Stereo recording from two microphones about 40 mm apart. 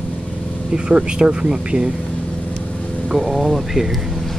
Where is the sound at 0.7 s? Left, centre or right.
Right.